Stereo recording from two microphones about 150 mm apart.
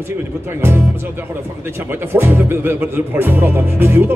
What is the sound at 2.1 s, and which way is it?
Speech, 15° right (ahead or behind).